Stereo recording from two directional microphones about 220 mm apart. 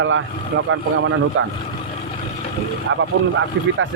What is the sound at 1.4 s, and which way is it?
Speech, 65° right (ahead or behind).